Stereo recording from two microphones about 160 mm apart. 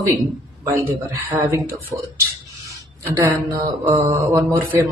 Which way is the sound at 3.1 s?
20° right (ahead or behind).